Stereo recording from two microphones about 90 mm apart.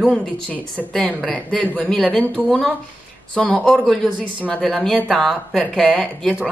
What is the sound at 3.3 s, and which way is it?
Speech, 10° left (ahead or behind).